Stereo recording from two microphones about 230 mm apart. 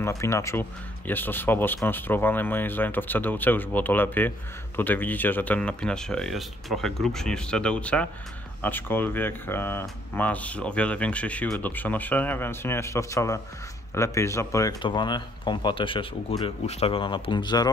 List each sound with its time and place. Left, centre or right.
0.2 s speech: centre